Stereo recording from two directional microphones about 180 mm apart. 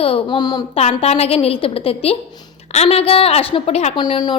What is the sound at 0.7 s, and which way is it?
A woman's voice, 35° left (ahead or behind).